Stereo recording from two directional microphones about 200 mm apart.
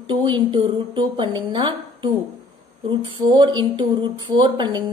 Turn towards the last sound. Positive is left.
turn(degrees=-20)  # may be behind; listen again after turning